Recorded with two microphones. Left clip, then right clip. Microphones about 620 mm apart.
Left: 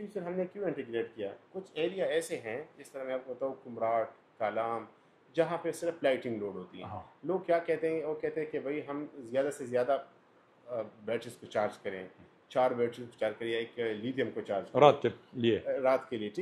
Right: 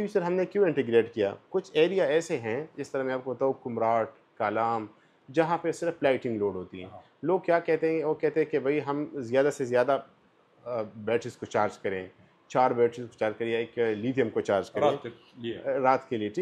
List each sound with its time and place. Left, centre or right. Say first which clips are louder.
0.0 s speech: right 9 dB; right
14.8 s speech: left 3 dB; left
15.7 s speech: right 4 dB; right